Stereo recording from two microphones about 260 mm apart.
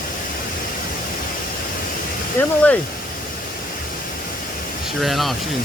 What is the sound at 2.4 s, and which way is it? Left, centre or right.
Speech, centre.